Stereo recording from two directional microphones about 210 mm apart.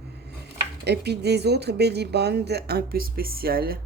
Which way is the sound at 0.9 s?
50° right (ahead or behind).